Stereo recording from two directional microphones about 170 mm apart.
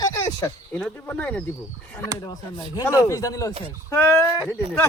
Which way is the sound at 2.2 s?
20° left (ahead or behind).